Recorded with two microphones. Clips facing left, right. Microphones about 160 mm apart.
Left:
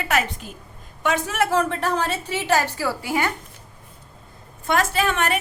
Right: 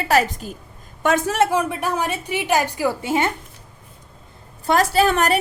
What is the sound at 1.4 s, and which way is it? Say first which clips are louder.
A woman's voice: even; 10° right (ahead or behind).